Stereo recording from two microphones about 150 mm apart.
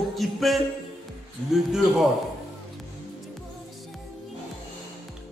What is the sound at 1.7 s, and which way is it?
Speech, 5° right (ahead or behind).